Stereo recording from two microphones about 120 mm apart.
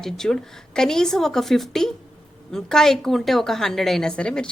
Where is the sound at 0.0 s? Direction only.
5° left (ahead or behind).